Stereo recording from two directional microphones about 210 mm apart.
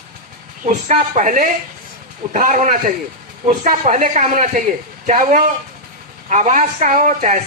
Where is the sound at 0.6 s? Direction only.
35° right (ahead or behind).